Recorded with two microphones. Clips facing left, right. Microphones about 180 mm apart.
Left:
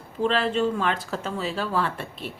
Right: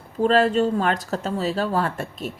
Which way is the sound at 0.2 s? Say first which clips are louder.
Right 5 dB; 40° right (ahead or behind).